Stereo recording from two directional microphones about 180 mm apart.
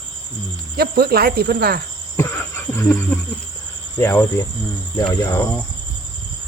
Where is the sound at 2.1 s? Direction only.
15° left (ahead or behind).